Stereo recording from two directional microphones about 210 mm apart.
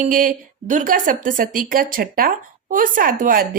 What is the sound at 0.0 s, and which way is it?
A woman's voice, 40° right (ahead or behind).